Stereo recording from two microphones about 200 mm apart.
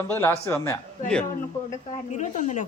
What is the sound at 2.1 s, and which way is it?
Speech, 35° left (ahead or behind).